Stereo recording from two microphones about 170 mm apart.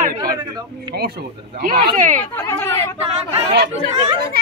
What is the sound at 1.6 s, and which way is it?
Speech, 50° right (ahead or behind).